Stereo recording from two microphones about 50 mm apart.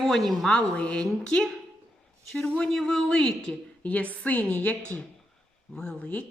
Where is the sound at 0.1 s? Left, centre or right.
Centre.